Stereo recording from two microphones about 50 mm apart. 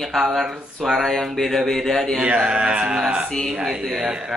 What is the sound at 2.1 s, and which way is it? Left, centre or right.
A man's voice, right.